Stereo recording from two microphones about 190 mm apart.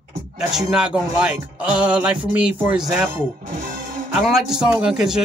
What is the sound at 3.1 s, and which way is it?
Speech, 45° right (ahead or behind).